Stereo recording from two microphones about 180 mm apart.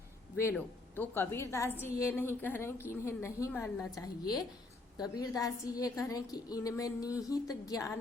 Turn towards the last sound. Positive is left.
turn(degrees=20)  # may be behind; listen again after turning